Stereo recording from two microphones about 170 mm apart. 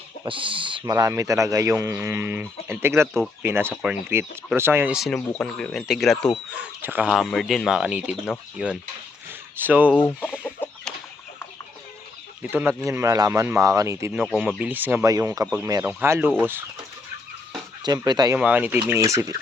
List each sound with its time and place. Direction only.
0.3 s speech: 30° right (ahead or behind)
0.9 s speech: 15° right (ahead or behind)
2.1 s speech: 10° right (ahead or behind)
4.9 s speech: 5° left (ahead or behind)
10.0 s chicken: 10° left (ahead or behind)
12.4 s speech: 10° right (ahead or behind)
14.1 s speech: 5° right (ahead or behind)
14.6 s speech: 10° right (ahead or behind)
17.8 s speech: 25° right (ahead or behind)
18.3 s speech: 10° right (ahead or behind)